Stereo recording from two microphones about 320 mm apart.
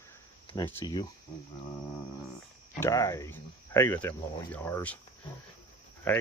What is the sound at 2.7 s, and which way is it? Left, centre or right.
Speech, centre.